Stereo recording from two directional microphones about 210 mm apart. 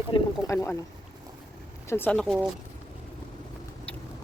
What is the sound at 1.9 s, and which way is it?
Speech, 10° left (ahead or behind).